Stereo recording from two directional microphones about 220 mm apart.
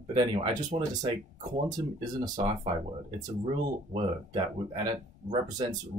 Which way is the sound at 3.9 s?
25° right (ahead or behind).